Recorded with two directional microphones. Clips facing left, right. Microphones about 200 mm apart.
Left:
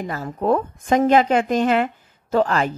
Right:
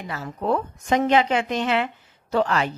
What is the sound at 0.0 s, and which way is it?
Speech, 45° left (ahead or behind).